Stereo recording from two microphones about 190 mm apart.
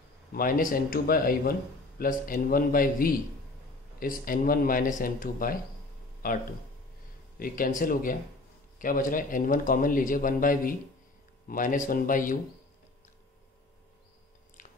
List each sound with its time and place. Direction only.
0.3 s a man's voice: 50° left (ahead or behind)
4.2 s a man's voice: 50° left (ahead or behind)
7.3 s a man's voice: 50° left (ahead or behind)
14.6 s biting: 40° left (ahead or behind)